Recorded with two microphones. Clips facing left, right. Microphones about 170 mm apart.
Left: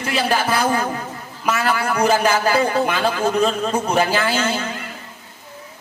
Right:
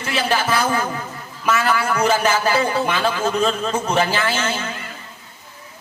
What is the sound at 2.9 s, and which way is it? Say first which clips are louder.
Speech: left 1 dB; 15° left (ahead or behind).